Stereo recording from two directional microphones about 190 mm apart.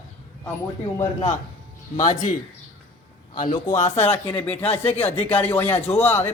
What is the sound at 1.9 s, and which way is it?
Speech, 40° left (ahead or behind).